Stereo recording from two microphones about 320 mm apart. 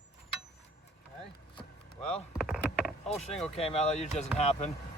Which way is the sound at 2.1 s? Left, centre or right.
Centre.